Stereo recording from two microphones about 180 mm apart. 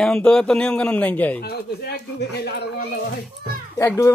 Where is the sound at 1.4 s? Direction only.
65° left (ahead or behind).